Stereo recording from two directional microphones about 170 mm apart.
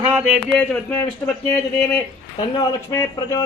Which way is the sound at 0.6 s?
10° left (ahead or behind).